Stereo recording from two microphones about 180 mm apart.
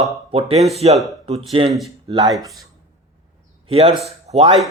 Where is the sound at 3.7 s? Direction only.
35° right (ahead or behind).